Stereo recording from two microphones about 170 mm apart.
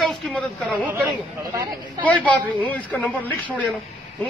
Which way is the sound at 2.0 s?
10° left (ahead or behind).